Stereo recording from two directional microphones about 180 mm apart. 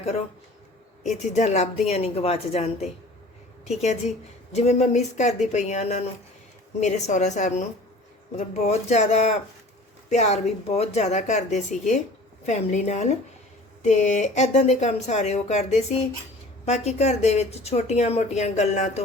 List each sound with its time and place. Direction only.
1.0 s speech: 40° left (ahead or behind)